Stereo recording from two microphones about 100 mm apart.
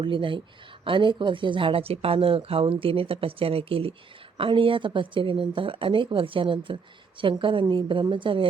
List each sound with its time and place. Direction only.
0.0 s speech: 60° right (ahead or behind)